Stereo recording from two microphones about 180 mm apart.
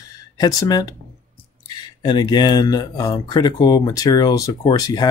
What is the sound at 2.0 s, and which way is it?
Speech, 25° left (ahead or behind).